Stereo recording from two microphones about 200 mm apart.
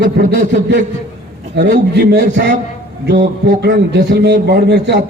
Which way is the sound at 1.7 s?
55° right (ahead or behind).